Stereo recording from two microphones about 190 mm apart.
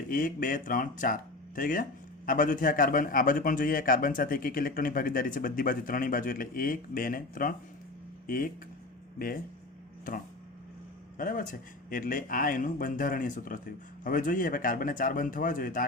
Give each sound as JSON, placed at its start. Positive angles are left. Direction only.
{"t": 0.1, "sound": "a man's voice", "side_deg": 45}
{"t": 9.1, "sound": "speech", "side_deg": 50}
{"t": 11.2, "sound": "a man's voice", "side_deg": 45}